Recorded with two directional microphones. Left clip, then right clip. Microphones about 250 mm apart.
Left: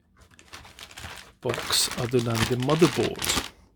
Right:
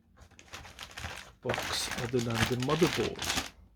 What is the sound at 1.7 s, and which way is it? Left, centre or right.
Speech, left.